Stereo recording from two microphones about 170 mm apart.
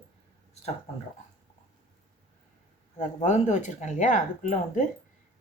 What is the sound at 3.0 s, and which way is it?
Speech, 45° left (ahead or behind).